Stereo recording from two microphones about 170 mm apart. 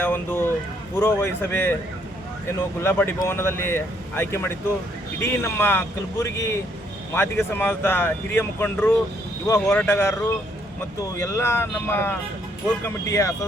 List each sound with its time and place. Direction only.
0.0 s speech: 10° left (ahead or behind)